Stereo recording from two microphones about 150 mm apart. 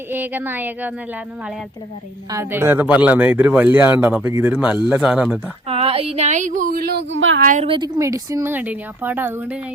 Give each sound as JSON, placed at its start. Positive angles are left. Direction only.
{"t": 0.1, "sound": "speech", "side_deg": -15}
{"t": 2.3, "sound": "speech", "side_deg": -15}
{"t": 5.6, "sound": "speech", "side_deg": -40}
{"t": 7.6, "sound": "a woman's voice", "side_deg": -35}
{"t": 7.9, "sound": "speech", "side_deg": -20}